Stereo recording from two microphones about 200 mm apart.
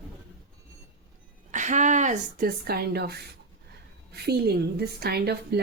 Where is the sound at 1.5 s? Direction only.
40° right (ahead or behind).